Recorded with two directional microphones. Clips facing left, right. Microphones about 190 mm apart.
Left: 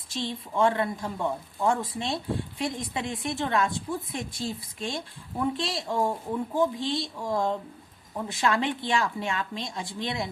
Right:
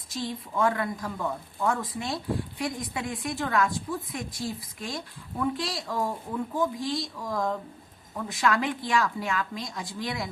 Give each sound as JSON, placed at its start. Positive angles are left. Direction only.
{"t": 0.1, "sound": "a woman's voice", "side_deg": 25}